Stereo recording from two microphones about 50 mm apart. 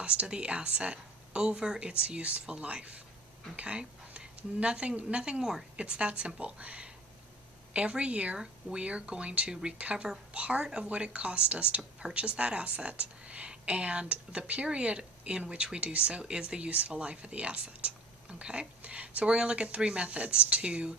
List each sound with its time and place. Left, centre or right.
0.0 s a woman's voice: right
5.2 s a woman's voice: centre